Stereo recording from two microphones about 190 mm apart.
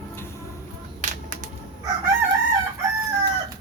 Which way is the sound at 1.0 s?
40° right (ahead or behind).